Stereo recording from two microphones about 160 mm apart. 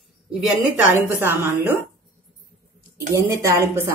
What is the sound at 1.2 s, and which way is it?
Speech, 15° right (ahead or behind).